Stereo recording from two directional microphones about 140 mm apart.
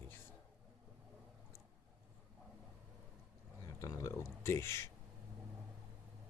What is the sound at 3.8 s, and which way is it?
Speech, 20° left (ahead or behind).